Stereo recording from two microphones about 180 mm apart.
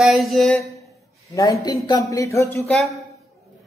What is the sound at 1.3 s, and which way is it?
Speech, 15° left (ahead or behind).